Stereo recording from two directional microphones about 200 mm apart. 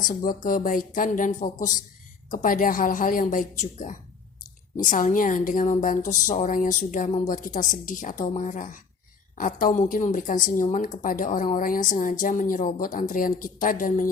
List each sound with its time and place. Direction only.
0.2 s a woman's voice: 40° left (ahead or behind)